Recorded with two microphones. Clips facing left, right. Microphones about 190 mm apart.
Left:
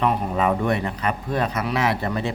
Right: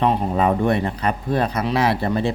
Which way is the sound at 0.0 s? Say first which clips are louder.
Right 3 dB; 30° right (ahead or behind).